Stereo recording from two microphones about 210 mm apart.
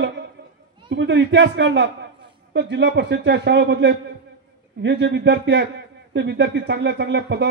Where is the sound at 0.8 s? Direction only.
60° right (ahead or behind).